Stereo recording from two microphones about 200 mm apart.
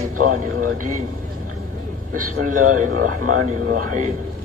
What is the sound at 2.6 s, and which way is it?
A man's voice, 90° right.